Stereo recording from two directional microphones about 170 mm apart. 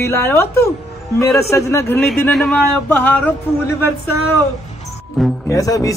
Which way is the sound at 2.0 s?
Centre (ahead or behind).